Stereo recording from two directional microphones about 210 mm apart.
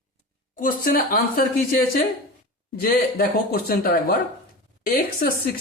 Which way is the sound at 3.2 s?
45° left (ahead or behind).